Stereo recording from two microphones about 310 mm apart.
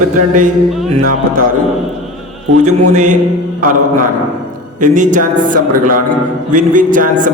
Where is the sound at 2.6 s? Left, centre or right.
Right.